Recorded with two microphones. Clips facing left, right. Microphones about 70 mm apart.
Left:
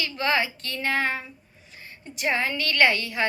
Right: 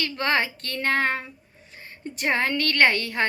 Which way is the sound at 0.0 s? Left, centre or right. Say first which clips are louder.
Right 1 dB; right.